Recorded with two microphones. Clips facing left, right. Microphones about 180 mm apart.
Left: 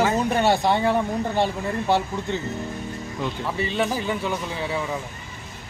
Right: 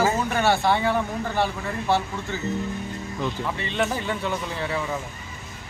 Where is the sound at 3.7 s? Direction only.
5° left (ahead or behind).